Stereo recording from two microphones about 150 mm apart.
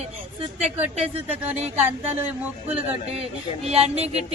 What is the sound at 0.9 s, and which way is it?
Speech, 40° right (ahead or behind).